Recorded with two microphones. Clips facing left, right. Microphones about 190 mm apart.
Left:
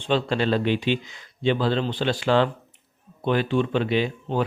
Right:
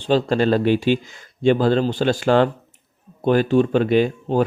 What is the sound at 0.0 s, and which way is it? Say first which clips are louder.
Speech: right 5 dB; 40° right (ahead or behind).